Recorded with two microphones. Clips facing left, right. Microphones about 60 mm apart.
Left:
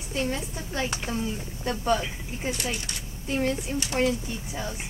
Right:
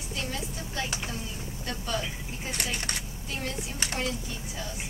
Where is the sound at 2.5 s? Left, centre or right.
Right.